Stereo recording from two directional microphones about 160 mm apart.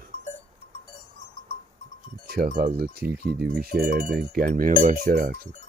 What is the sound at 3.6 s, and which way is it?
Speech, 70° right (ahead or behind).